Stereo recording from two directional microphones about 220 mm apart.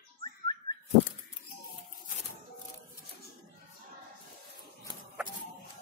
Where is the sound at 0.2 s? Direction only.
20° left (ahead or behind).